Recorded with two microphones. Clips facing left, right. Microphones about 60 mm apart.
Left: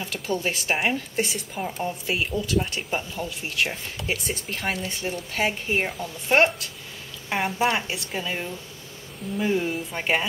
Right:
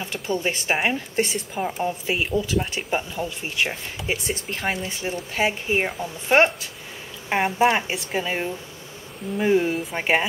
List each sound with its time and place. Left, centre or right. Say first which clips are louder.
0.0 s speech: right 2 dB; centre
8.2 s speech: right 5 dB; centre
9.7 s speech: right 3 dB; centre
9.9 s speech: right 3 dB; centre